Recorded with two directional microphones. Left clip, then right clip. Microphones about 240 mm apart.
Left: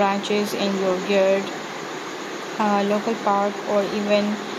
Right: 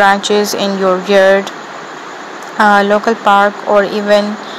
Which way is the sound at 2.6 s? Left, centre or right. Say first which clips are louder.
Right 13 dB; right.